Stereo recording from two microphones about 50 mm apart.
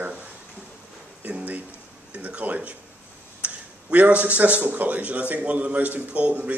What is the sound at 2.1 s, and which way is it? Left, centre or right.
A man's voice, right.